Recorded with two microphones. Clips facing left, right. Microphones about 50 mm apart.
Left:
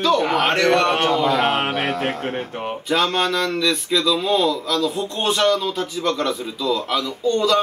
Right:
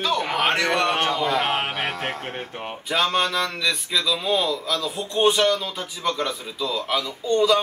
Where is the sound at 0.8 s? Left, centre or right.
Centre.